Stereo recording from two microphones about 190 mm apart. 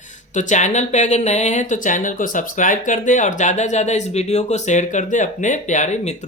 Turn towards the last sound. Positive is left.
turn(degrees=40)  # may be behind; listen again after turning